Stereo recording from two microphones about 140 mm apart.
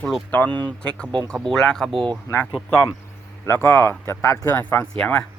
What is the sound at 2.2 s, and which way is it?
Speech, 15° left (ahead or behind).